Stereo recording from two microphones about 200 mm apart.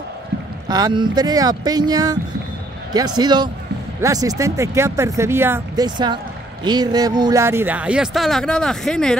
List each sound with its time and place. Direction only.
0.7 s speech: 20° right (ahead or behind); by 9.2 s 5° left (ahead or behind)